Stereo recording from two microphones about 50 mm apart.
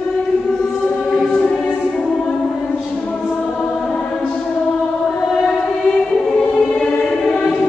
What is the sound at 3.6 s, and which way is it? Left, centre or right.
Choir, left.